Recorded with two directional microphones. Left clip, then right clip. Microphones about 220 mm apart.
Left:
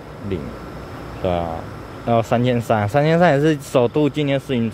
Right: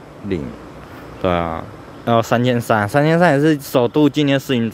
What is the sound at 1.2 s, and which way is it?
Speech, 30° right (ahead or behind).